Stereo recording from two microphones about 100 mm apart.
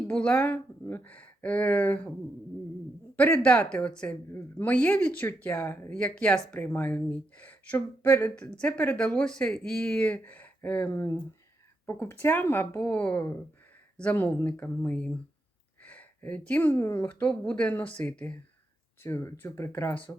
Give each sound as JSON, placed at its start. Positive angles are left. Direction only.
{"t": 0.1, "sound": "speech", "side_deg": 10}
{"t": 3.2, "sound": "speech", "side_deg": 15}
{"t": 19.0, "sound": "speech", "side_deg": 30}
{"t": 19.7, "sound": "speech", "side_deg": 15}